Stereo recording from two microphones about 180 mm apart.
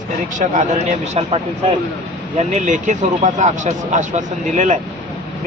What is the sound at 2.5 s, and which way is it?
Speech, 45° right (ahead or behind).